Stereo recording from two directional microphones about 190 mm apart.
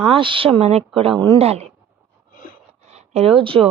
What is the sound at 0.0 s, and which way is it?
Speech, 30° right (ahead or behind).